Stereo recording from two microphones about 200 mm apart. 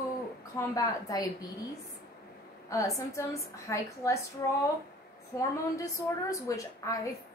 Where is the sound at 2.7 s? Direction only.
15° left (ahead or behind).